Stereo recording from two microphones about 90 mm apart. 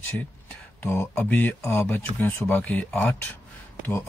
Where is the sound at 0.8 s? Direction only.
25° left (ahead or behind).